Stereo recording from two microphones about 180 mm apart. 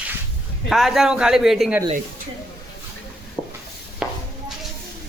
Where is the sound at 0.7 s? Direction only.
Centre (ahead or behind).